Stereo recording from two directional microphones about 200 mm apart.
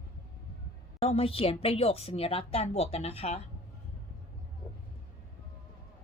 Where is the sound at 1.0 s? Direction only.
30° left (ahead or behind).